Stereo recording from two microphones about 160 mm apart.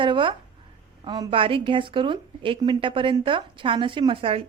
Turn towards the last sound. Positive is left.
turn(degrees=-35)  # may be behind; listen again after turning